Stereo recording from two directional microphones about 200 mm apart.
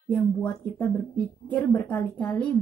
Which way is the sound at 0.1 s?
5° left (ahead or behind).